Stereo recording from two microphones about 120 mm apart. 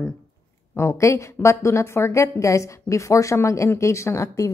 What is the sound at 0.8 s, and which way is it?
A woman's voice, 25° left (ahead or behind).